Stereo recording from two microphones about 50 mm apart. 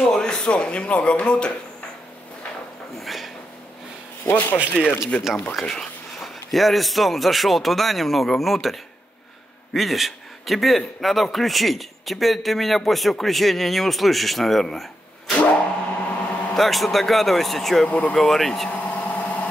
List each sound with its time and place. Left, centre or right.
0.0 s speech: centre
3.0 s a sound: centre
4.2 s speech: left
4.8 s speech: centre
5.6 s a man's voice: centre
9.8 s a man's voice: centre
15.5 s a sound: left
16.5 s a man's voice: centre
17.8 s speech: left
18.1 s speech: centre
18.7 s vehicle: left